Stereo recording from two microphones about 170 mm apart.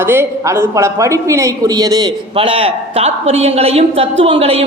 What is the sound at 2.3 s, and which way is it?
A man's voice, 30° right (ahead or behind).